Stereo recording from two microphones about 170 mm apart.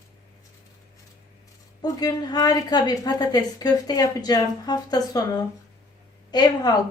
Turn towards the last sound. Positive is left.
turn(degrees=25)  # may be behind; listen again after turning